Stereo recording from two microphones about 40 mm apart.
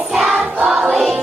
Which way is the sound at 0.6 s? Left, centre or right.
Centre.